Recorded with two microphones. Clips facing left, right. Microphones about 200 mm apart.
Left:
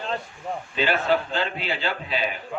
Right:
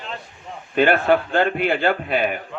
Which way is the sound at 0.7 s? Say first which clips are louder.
Right 6 dB; 55° right (ahead or behind).